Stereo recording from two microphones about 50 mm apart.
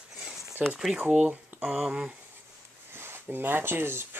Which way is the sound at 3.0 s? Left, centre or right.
Right.